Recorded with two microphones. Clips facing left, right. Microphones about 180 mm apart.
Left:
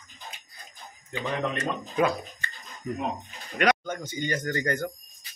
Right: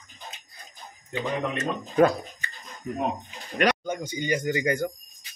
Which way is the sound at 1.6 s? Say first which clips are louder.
Right 8 dB; 40° right (ahead or behind).